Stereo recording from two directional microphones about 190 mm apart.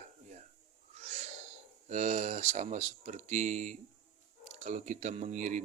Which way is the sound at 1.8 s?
40° right (ahead or behind).